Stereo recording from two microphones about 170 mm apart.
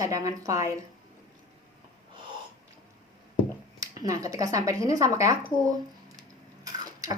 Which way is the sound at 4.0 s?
20° right (ahead or behind).